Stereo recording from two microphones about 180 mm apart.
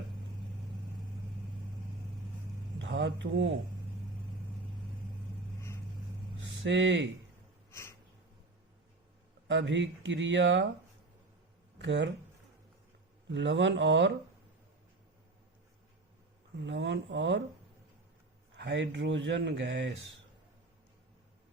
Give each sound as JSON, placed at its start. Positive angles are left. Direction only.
{"t": 2.7, "sound": "a sound", "side_deg": -85}
{"t": 5.5, "sound": "vehicle", "side_deg": 15}
{"t": 6.4, "sound": "speech", "side_deg": -85}
{"t": 7.7, "sound": "a sound", "side_deg": 15}
{"t": 9.5, "sound": "speech", "side_deg": -80}
{"t": 11.8, "sound": "speech", "side_deg": -80}
{"t": 13.3, "sound": "speech", "side_deg": -85}
{"t": 16.6, "sound": "speech", "side_deg": -80}
{"t": 18.5, "sound": "speech", "side_deg": -75}